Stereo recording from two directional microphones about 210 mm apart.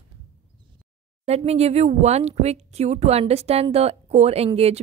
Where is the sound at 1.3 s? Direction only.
30° right (ahead or behind).